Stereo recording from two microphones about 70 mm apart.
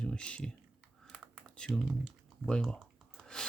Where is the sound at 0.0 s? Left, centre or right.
Centre.